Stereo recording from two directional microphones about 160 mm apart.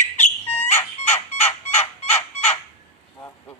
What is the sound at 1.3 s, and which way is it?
Fowl, 40° left (ahead or behind).